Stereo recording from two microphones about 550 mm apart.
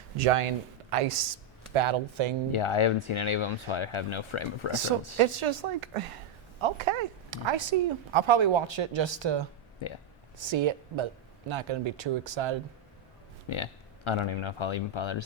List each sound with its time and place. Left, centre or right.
0.2 s speech: right
1.7 s a woman's voice: right
2.5 s speech: left
4.7 s a woman's voice: right
6.6 s speech: right
9.8 s speech: left
10.3 s a woman's voice: right
13.5 s speech: left